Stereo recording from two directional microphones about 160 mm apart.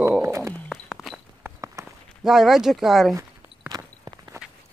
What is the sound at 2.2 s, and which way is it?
Speech, centre (ahead or behind).